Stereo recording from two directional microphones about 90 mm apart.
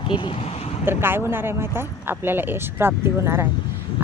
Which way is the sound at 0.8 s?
25° right (ahead or behind).